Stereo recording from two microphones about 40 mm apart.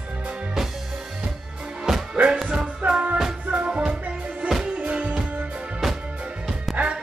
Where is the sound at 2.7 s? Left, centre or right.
Right.